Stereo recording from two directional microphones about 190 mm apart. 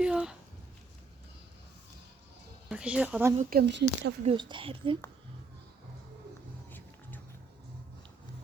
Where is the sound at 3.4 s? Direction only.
50° right (ahead or behind).